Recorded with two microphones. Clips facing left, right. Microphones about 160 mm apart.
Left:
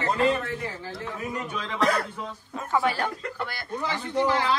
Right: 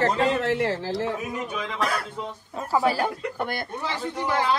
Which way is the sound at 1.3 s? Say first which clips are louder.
Right 2 dB; 15° right (ahead or behind).